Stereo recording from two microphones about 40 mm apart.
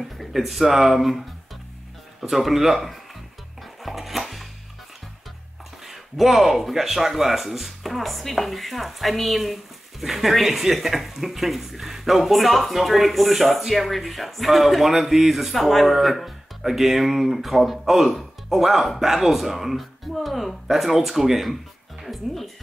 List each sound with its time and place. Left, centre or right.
0.0 s speech: centre
3.8 s music: centre
5.9 s speech: centre